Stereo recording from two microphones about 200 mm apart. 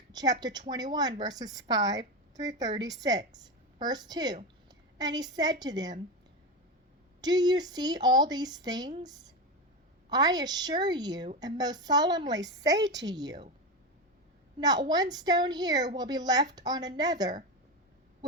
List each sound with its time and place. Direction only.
0.1 s a woman's voice: 20° right (ahead or behind)
7.2 s a woman's voice: 20° right (ahead or behind)
14.6 s a woman's voice: 20° right (ahead or behind)